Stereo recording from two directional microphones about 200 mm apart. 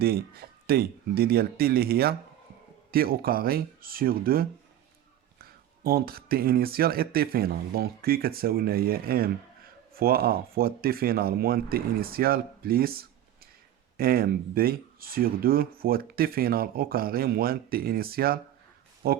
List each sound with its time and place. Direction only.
0.0 s speech: 50° right (ahead or behind)